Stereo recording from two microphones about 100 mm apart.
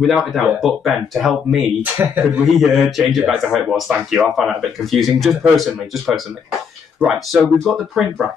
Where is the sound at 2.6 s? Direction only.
Centre (ahead or behind).